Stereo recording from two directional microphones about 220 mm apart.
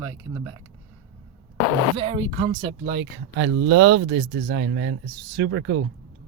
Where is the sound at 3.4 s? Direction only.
60° right (ahead or behind).